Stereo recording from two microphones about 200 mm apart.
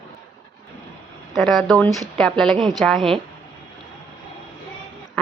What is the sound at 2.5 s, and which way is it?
Speech, 20° right (ahead or behind).